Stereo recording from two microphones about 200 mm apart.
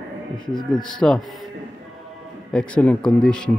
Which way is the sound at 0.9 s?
Centre (ahead or behind).